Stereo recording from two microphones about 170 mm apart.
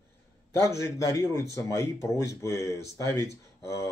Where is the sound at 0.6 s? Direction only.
15° left (ahead or behind).